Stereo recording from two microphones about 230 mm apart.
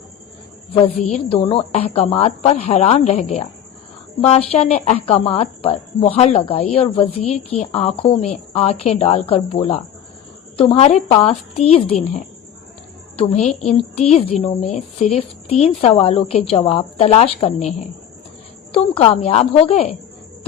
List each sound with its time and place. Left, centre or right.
1.1 s a woman's voice: left
13.1 s a woman's voice: left